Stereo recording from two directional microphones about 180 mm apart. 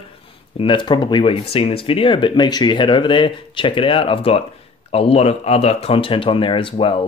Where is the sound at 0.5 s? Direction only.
25° left (ahead or behind).